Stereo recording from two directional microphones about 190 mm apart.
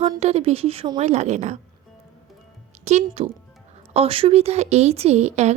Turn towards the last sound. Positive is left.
turn(degrees=-35)  # may be behind; listen again after turning